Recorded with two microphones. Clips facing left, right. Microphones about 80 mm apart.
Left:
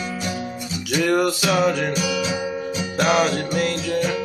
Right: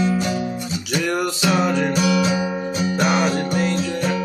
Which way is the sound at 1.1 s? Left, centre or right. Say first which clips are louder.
Left 1 dB; centre.